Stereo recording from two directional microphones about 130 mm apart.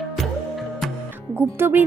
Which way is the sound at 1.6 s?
20° right (ahead or behind).